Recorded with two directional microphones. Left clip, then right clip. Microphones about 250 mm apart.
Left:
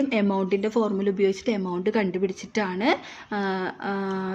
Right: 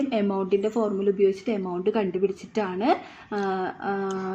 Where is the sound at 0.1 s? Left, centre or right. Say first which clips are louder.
Even; left.